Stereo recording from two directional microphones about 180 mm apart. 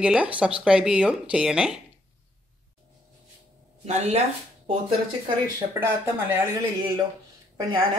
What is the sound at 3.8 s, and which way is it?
Speech, 40° right (ahead or behind).